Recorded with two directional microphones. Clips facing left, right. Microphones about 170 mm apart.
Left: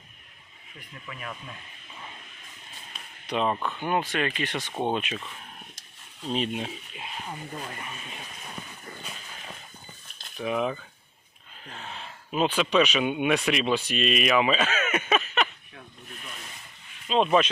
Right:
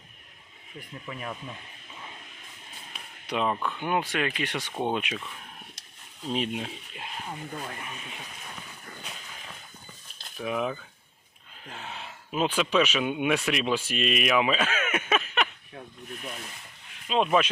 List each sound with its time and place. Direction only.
1.0 s speech: 30° right (ahead or behind)
2.9 s a sound: 10° right (ahead or behind)
3.5 s speech: 10° left (ahead or behind)
3.8 s speech: 10° right (ahead or behind)
4.7 s speech: 15° left (ahead or behind)
4.9 s speech: 10° right (ahead or behind)
6.3 s speech: 10° right (ahead or behind)
10.3 s speech: centre (ahead or behind)
17.1 s speech: 5° right (ahead or behind)